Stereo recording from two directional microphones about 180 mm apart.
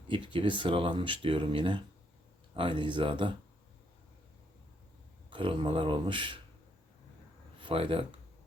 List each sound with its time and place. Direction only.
0.1 s speech: 25° right (ahead or behind)
5.3 s speech: 25° right (ahead or behind)
7.6 s speech: 30° right (ahead or behind)